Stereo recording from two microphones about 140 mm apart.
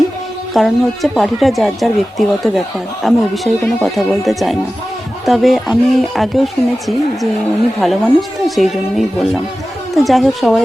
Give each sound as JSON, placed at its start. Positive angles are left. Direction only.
{"t": 0.5, "sound": "speech", "side_deg": 0}